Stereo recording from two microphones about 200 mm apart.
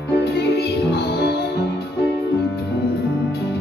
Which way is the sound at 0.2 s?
55° left (ahead or behind).